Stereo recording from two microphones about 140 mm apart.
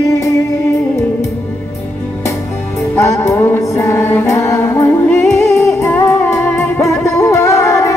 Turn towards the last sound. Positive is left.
turn(degrees=20)  # may be behind; listen again after turning